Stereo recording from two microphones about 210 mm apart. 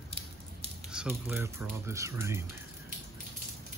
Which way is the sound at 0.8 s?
5° right (ahead or behind).